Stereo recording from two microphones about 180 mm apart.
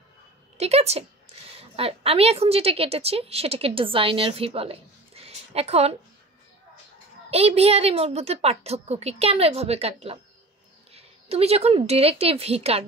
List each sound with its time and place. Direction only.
0.6 s a woman's voice: 35° right (ahead or behind)
7.2 s a woman's voice: 35° right (ahead or behind)